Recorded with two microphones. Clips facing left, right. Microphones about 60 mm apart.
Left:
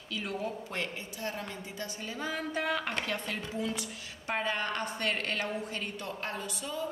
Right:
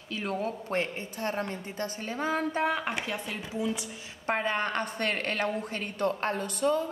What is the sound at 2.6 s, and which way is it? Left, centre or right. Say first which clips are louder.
Speech: right 4 dB; right.